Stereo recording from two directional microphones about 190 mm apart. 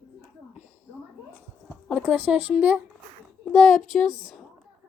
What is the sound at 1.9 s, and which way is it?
Speech, 10° right (ahead or behind).